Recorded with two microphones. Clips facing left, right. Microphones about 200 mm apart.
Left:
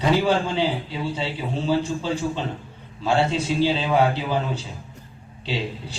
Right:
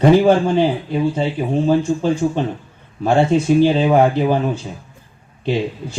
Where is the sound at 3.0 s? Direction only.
55° right (ahead or behind).